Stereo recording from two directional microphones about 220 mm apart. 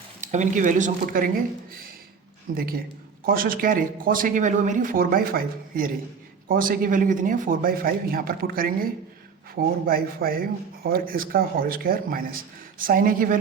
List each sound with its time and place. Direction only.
0.2 s speech: 35° right (ahead or behind)
2.6 s speech: 40° right (ahead or behind)